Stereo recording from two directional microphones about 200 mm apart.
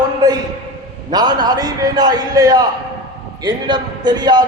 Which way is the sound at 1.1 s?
20° right (ahead or behind).